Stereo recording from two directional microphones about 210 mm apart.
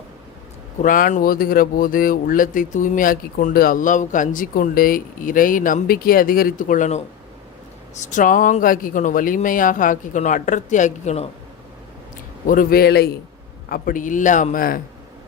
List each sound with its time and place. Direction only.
0.8 s speech: 40° left (ahead or behind)
8.0 s speech: 40° left (ahead or behind)
12.5 s a man's voice: 45° left (ahead or behind)